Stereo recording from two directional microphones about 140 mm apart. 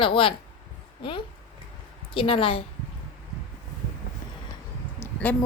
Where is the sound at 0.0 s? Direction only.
40° left (ahead or behind).